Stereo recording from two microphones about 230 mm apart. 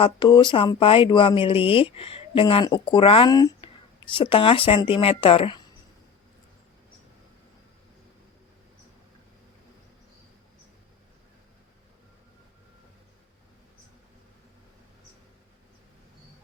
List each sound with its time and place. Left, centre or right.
0.0 s speech: centre